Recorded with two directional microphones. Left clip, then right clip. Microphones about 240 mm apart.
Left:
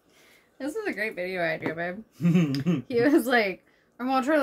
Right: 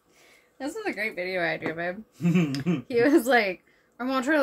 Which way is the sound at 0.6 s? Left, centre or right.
Centre.